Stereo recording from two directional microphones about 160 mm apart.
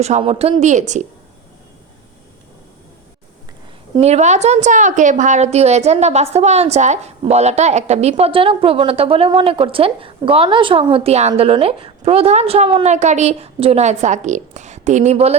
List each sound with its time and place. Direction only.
0.0 s a woman's voice: 40° right (ahead or behind)
4.0 s a woman's voice: 45° right (ahead or behind)
8.1 s a woman's voice: 35° right (ahead or behind)